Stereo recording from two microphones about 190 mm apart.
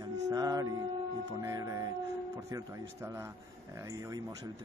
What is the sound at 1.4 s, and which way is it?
Speech, 15° right (ahead or behind).